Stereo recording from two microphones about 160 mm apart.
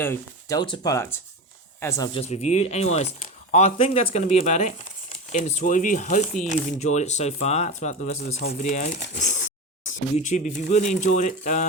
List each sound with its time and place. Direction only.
0.0 s speech: 15° left (ahead or behind)
2.1 s speech: 40° left (ahead or behind)
10.2 s speech: 50° left (ahead or behind)